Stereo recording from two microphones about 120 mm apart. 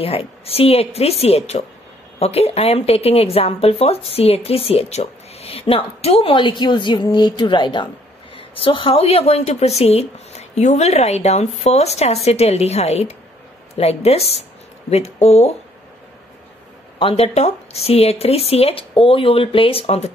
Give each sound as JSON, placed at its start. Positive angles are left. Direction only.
{"t": 0.0, "sound": "speech", "side_deg": 50}
{"t": 17.0, "sound": "speech", "side_deg": 50}